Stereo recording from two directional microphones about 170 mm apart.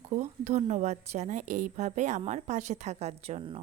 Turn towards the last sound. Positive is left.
turn(degrees=-35)  # may be behind; listen again after turning